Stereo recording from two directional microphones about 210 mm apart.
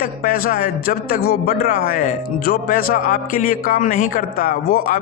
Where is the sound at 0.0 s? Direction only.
45° left (ahead or behind).